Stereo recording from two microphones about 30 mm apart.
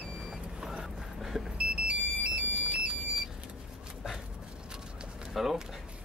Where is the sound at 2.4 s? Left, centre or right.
Right.